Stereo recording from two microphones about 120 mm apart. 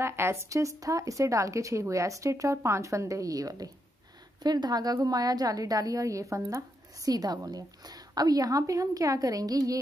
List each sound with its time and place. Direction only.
0.0 s a woman's voice: 20° right (ahead or behind)